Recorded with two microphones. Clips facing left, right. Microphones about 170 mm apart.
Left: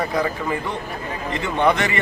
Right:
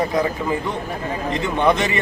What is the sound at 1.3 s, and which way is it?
Speech, 20° right (ahead or behind).